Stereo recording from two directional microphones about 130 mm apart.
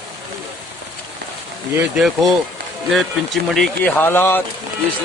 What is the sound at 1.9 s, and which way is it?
Speech, centre (ahead or behind).